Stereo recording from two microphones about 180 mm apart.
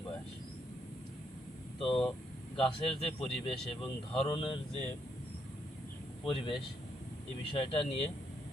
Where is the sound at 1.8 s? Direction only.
30° left (ahead or behind).